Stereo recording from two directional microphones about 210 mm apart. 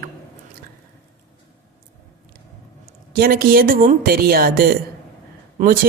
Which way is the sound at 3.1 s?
45° right (ahead or behind).